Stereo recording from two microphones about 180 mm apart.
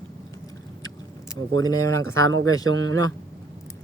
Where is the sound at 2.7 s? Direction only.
90° right.